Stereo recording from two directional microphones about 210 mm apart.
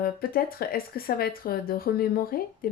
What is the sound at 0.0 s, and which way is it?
Speech, 45° left (ahead or behind).